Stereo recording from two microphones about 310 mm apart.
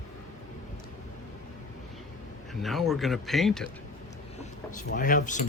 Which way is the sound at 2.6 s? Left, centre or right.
Centre.